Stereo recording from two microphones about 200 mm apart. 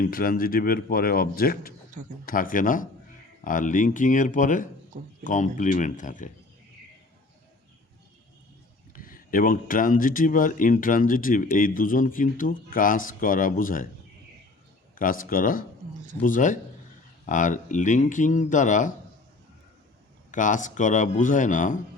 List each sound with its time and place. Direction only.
0.0 s speech: 45° left (ahead or behind)
9.0 s speech: 45° left (ahead or behind)
14.9 s speech: 45° left (ahead or behind)
20.3 s speech: 40° left (ahead or behind)